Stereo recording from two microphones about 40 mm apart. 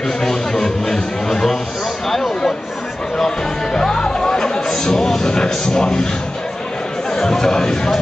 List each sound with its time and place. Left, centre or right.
0.2 s a sound: centre
3.2 s music: centre
5.3 s speech: centre
7.2 s speech: centre